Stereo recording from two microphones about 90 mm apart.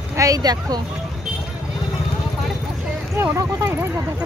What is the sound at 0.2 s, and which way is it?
Speech, 45° right (ahead or behind).